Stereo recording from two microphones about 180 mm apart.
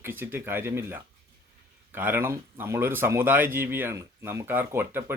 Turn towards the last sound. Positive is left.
turn(degrees=-10)  # may be behind; listen again after turning